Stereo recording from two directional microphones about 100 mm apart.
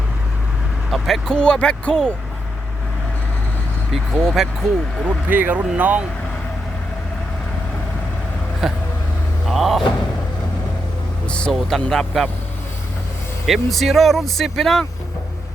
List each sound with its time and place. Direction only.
0.9 s speech: centre (ahead or behind)
3.9 s speech: 5° right (ahead or behind)
5.0 s speech: 15° right (ahead or behind)
8.6 s speech: centre (ahead or behind)
11.3 s speech: 10° left (ahead or behind)
13.5 s speech: centre (ahead or behind)